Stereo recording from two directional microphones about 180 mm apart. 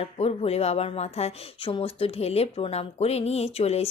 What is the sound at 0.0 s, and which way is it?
A woman's voice, 35° left (ahead or behind).